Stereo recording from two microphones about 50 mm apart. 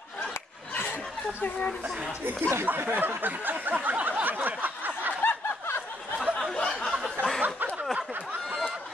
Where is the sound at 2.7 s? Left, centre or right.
Right.